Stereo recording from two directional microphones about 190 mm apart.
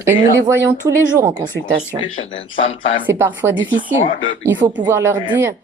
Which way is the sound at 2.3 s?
30° left (ahead or behind).